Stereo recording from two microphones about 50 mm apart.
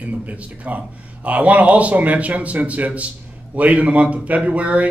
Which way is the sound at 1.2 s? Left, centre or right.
Right.